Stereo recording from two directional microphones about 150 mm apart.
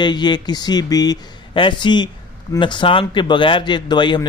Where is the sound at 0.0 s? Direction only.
30° left (ahead or behind).